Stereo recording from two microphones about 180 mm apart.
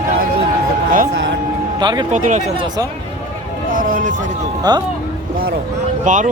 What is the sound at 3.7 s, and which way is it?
Speech, 45° right (ahead or behind).